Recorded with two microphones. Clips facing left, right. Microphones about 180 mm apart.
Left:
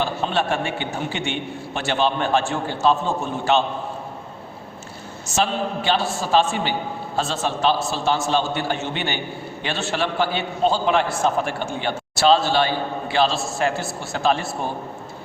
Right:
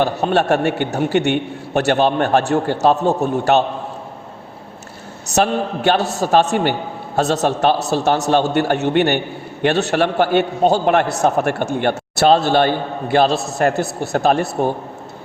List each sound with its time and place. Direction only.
0.0 s a man's voice: 65° right (ahead or behind)
5.3 s a man's voice: 60° right (ahead or behind)
13.6 s a man's voice: 60° right (ahead or behind)